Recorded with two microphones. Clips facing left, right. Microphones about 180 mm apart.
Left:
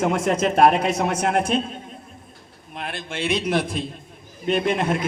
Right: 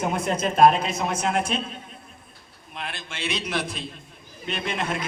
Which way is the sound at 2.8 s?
55° left (ahead or behind).